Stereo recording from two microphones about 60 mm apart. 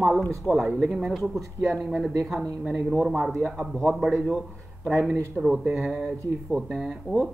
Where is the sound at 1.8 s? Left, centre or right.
Centre.